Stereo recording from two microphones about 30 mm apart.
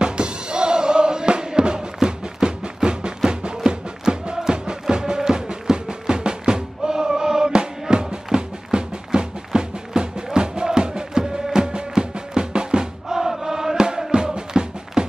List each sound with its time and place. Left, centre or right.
0.0 s music: right
13.1 s chant: centre
14.1 s music: right